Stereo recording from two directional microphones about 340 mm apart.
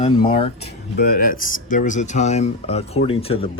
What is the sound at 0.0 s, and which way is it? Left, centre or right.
Speech, centre.